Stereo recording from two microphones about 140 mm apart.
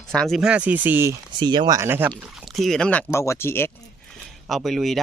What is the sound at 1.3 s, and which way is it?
Speech, 30° right (ahead or behind).